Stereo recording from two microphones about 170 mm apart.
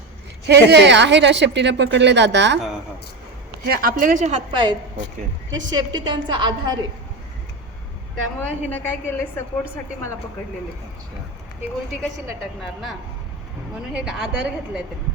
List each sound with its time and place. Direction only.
0.4 s a woman's voice: 80° right
3.7 s a woman's voice: 60° right (ahead or behind); by 6.7 s 25° right (ahead or behind)
8.4 s a woman's voice: 10° left (ahead or behind)
12.6 s speech: centre (ahead or behind)